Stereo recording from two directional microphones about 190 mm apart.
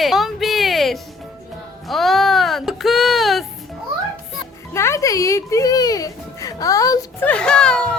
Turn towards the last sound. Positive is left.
turn(degrees=5)  # may be behind; listen again after turning